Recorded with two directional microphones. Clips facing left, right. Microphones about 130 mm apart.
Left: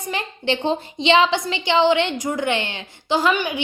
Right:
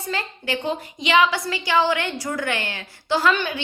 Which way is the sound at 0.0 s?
20° left (ahead or behind).